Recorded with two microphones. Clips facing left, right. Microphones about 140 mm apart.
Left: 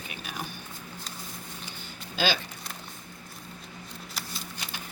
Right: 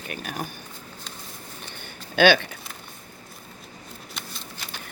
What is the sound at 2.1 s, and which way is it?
Speech, 65° right (ahead or behind).